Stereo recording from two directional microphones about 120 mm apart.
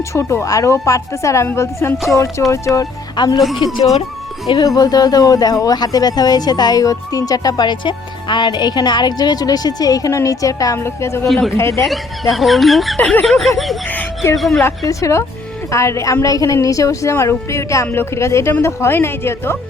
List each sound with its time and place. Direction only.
0.1 s a woman's voice: 25° left (ahead or behind)
4.4 s speech: 35° left (ahead or behind)
11.3 s speech: centre (ahead or behind)
11.5 s a woman's voice: 20° left (ahead or behind)
11.9 s speech: centre (ahead or behind)
14.8 s a woman's voice: 25° left (ahead or behind)